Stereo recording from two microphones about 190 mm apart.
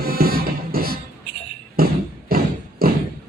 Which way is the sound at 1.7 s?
50° right (ahead or behind).